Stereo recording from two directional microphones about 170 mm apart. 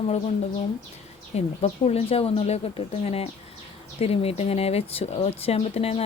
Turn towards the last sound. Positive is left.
turn(degrees=35)  # may be behind; listen again after turning